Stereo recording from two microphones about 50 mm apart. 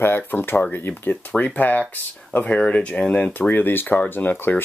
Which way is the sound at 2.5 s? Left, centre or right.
Left.